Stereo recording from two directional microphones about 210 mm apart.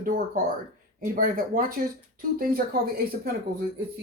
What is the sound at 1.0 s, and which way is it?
Speech, 40° right (ahead or behind).